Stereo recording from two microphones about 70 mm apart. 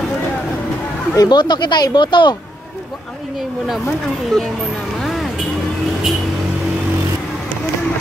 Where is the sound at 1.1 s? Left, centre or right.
Left.